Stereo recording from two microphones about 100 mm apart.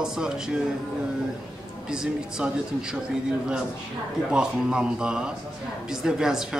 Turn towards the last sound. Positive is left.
turn(degrees=-5)  # may be behind; listen again after turning